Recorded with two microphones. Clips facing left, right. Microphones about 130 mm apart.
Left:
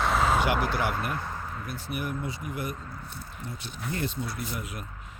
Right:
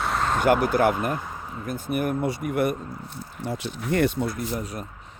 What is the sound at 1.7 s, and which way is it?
Speech, 50° right (ahead or behind).